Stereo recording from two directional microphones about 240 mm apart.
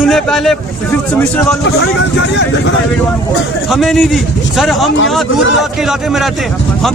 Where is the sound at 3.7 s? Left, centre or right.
Centre.